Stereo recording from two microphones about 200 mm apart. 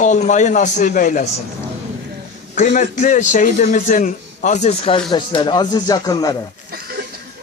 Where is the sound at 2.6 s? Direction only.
40° left (ahead or behind); by 6.3 s 20° left (ahead or behind).